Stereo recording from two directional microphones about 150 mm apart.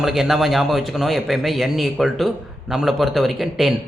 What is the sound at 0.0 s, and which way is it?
A man's voice, 5° right (ahead or behind).